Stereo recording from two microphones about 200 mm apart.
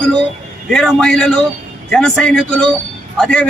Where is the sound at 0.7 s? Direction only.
5° left (ahead or behind).